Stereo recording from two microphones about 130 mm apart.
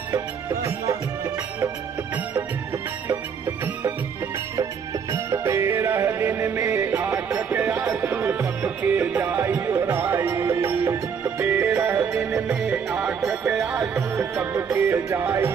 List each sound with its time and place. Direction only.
3.1 s music: 15° right (ahead or behind)
5.1 s music: 20° right (ahead or behind)
13.2 s music: 20° right (ahead or behind)
13.5 s music: 5° right (ahead or behind)
13.7 s music: 20° right (ahead or behind)